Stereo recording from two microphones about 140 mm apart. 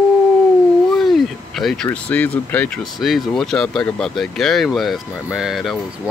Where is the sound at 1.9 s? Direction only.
10° left (ahead or behind).